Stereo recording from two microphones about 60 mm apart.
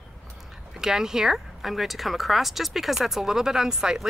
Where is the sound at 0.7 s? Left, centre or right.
Centre.